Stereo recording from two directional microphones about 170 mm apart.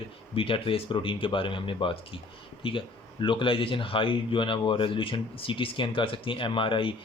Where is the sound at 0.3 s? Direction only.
30° left (ahead or behind).